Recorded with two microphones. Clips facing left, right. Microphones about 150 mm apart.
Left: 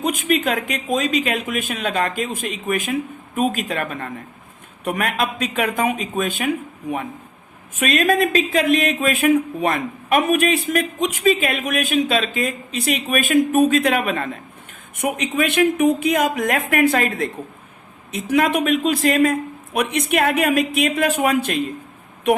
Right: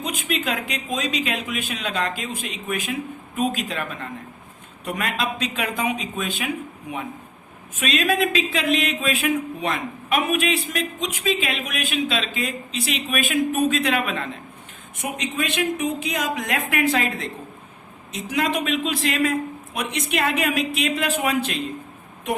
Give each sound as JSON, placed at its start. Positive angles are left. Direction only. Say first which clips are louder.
{"t": 0.0, "sound": "speech", "louder": "left 7 dB", "side_deg": 50}
{"t": 7.8, "sound": "speech", "louder": "left 4 dB", "side_deg": 50}
{"t": 19.7, "sound": "speech", "louder": "left 7 dB", "side_deg": 55}